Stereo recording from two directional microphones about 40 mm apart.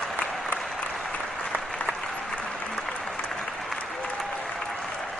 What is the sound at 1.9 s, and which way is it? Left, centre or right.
Applause, centre.